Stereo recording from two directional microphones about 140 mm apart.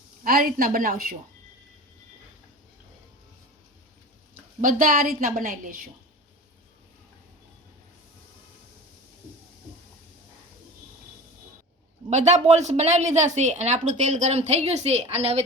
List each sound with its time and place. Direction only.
0.3 s a woman's voice: 90° right
4.6 s a woman's voice: 85° right
12.1 s a woman's voice: 55° right (ahead or behind)